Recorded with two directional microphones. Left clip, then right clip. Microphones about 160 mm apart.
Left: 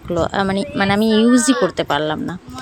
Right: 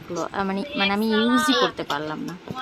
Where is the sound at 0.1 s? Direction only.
40° left (ahead or behind).